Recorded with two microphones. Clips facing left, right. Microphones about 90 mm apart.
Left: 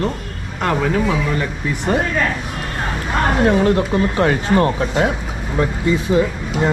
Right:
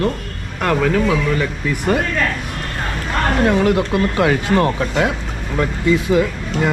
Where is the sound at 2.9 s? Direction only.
5° left (ahead or behind).